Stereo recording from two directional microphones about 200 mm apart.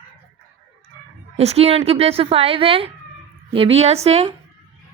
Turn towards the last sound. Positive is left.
turn(degrees=-30)  # may be behind; listen again after turning